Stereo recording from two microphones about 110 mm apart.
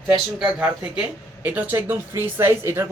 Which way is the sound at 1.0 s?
15° right (ahead or behind).